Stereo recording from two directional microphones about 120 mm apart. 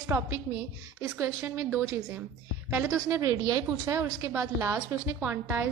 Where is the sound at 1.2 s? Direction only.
20° right (ahead or behind).